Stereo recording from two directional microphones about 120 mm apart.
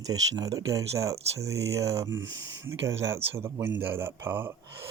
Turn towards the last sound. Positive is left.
turn(degrees=-20)  # may be behind; listen again after turning